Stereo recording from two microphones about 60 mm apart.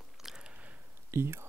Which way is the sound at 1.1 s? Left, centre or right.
Right.